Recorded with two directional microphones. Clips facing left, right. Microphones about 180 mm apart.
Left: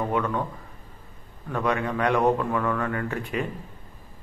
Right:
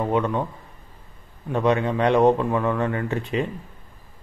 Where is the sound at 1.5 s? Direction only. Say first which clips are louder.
Right 5 dB; 25° right (ahead or behind).